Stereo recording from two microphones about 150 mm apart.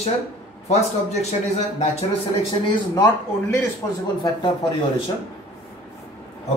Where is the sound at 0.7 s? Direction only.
45° left (ahead or behind).